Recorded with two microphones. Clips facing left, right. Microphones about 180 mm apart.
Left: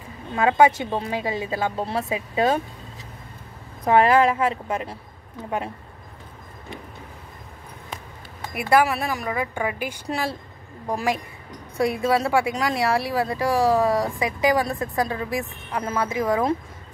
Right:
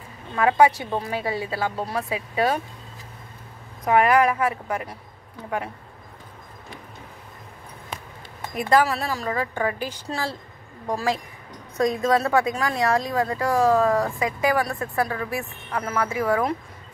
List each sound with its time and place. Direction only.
0.4 s speech: 25° left (ahead or behind)
3.8 s speech: 30° left (ahead or behind)
8.5 s a woman's voice: 10° left (ahead or behind)
11.7 s a woman's voice: 10° left (ahead or behind)